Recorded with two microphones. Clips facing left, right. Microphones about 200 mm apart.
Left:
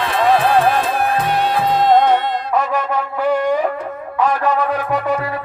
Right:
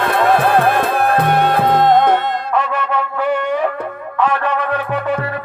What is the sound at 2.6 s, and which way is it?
Music, 40° left (ahead or behind).